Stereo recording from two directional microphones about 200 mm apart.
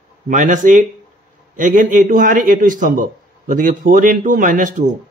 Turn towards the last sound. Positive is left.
turn(degrees=-40)  # may be behind; listen again after turning